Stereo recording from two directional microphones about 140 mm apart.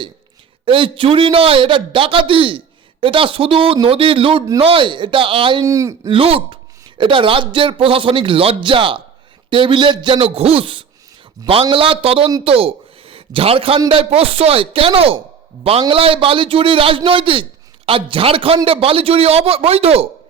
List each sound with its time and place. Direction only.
0.6 s a man's voice: 40° right (ahead or behind)
5.6 s speech: 25° right (ahead or behind)
6.1 s a man's voice: 40° right (ahead or behind)